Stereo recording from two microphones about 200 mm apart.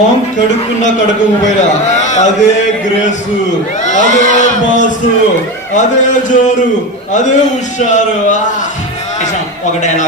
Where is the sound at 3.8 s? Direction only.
40° left (ahead or behind).